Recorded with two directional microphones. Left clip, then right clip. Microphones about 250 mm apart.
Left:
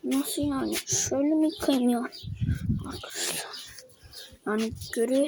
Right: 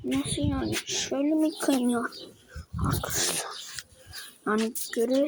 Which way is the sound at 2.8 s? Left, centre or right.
Centre.